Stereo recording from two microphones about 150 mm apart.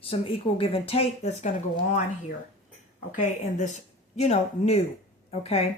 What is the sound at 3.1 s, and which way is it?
A woman's voice, 55° left (ahead or behind).